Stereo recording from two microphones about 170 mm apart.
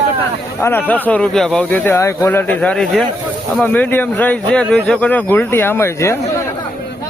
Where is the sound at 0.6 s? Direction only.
10° left (ahead or behind).